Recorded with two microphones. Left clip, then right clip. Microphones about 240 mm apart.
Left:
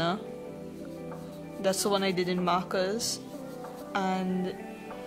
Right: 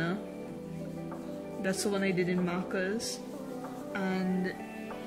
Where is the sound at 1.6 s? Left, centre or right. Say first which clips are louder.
Left 5 dB; centre.